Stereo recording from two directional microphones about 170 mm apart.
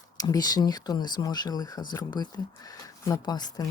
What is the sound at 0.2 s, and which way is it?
Speech, 20° left (ahead or behind).